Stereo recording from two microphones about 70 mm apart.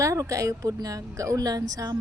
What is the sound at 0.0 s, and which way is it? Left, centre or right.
A woman's voice, right.